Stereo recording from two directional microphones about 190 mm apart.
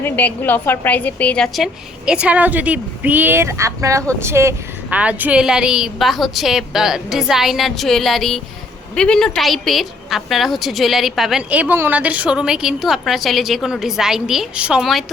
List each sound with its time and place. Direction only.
0.0 s a woman's voice: 10° left (ahead or behind)